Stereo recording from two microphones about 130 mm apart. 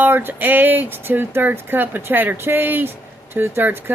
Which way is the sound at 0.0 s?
15° right (ahead or behind).